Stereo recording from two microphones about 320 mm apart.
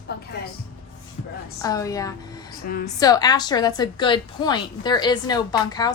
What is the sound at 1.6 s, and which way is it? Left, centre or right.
Speech, centre.